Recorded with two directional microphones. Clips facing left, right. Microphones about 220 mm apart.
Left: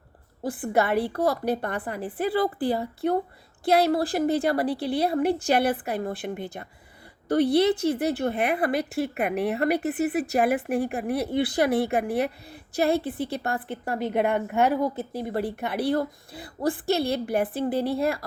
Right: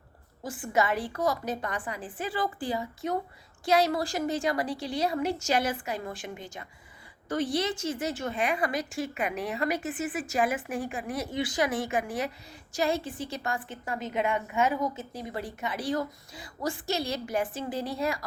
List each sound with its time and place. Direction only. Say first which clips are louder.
0.4 s a woman's voice: left 4 dB; 55° left (ahead or behind)